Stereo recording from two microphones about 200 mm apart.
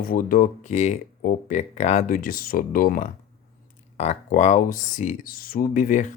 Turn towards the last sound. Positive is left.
turn(degrees=40)  # may be behind; listen again after turning